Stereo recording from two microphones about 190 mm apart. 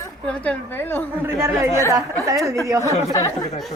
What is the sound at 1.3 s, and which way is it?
Chatter, 15° right (ahead or behind).